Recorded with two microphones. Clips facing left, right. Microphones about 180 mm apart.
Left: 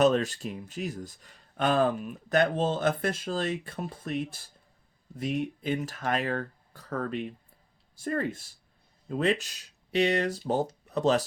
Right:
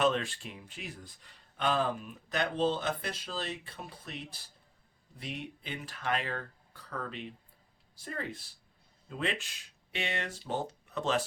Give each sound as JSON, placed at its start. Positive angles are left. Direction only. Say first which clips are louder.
{"t": 0.0, "sound": "speech", "louder": "left 6 dB", "side_deg": 40}